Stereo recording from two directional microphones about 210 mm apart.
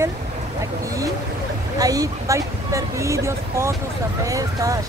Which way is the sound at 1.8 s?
15° right (ahead or behind).